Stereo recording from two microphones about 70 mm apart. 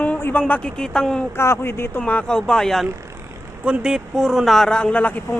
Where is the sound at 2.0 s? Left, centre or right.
Left; by 2.9 s centre.